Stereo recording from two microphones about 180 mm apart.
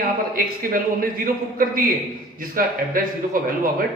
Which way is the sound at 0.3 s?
50° right (ahead or behind).